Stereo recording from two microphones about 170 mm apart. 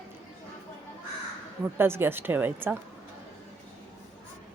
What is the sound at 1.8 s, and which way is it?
Speech, 15° right (ahead or behind).